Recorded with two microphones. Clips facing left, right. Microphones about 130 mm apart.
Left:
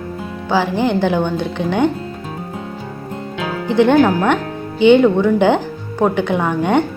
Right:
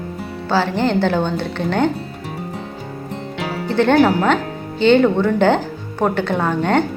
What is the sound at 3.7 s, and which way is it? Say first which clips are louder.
Speech: left 2 dB; 15° left (ahead or behind).